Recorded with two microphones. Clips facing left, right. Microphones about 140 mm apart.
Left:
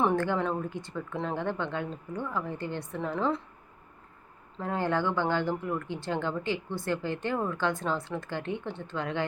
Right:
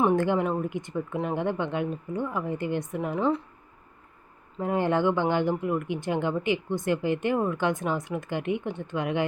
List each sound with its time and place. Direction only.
0.0 s speech: 10° right (ahead or behind)
4.6 s speech: 20° right (ahead or behind)